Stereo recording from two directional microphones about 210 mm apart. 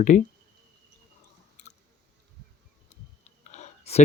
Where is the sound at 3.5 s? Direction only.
30° left (ahead or behind).